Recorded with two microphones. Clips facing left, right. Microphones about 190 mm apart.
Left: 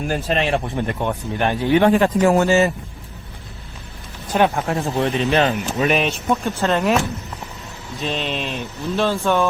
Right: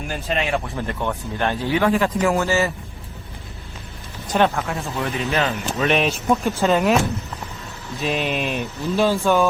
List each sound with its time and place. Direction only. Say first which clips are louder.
0.1 s speech: left 2 dB; 35° left (ahead or behind)
0.9 s speech: left 2 dB; 20° left (ahead or behind)
1.9 s speech: left 4 dB; 30° left (ahead or behind)
4.3 s speech: left 1 dB; 10° left (ahead or behind)
4.5 s speech: left 5 dB; 35° left (ahead or behind)
5.8 s a man's voice: even; centre (ahead or behind)
8.0 s speech: right 2 dB; 10° right (ahead or behind)